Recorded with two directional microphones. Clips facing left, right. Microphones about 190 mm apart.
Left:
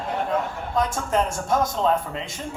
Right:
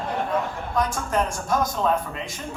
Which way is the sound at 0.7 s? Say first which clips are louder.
Left 1 dB; 25° left (ahead or behind).